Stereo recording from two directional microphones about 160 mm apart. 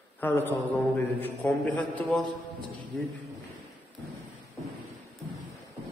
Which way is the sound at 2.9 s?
Centre (ahead or behind).